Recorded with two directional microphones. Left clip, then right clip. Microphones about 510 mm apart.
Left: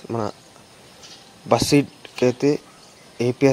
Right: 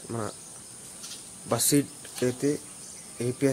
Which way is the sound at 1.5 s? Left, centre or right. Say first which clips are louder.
Left 8 dB; right.